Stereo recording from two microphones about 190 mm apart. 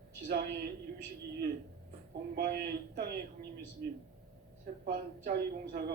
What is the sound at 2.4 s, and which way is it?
A man's voice, 55° right (ahead or behind).